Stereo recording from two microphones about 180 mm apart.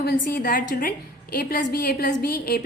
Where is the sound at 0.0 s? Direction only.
55° left (ahead or behind).